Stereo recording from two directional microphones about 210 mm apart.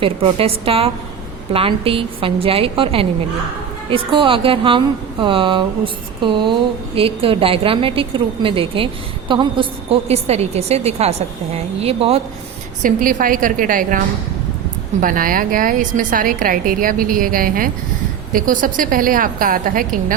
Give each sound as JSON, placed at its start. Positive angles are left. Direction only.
{"t": 0.0, "sound": "a woman's voice", "side_deg": -25}
{"t": 12.8, "sound": "a woman's voice", "side_deg": -40}
{"t": 15.0, "sound": "a woman's voice", "side_deg": -40}